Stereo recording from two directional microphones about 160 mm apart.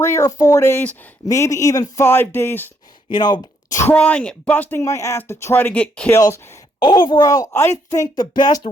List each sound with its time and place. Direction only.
0.0 s speech: 15° left (ahead or behind)
3.1 s speech: 30° left (ahead or behind)
3.8 s speech: 10° left (ahead or behind)
6.8 s speech: 30° left (ahead or behind)